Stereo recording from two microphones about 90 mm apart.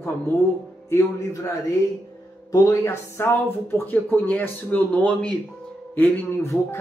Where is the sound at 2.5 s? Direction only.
35° left (ahead or behind).